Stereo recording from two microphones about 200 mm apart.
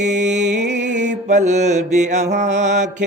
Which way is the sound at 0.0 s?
35° right (ahead or behind).